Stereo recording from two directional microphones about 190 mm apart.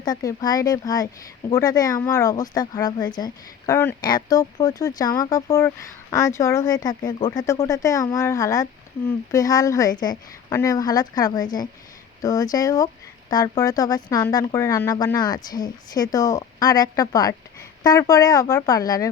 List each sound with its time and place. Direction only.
0.0 s speech: 20° left (ahead or behind)